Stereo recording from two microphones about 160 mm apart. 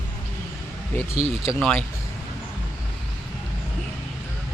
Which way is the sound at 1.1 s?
35° right (ahead or behind).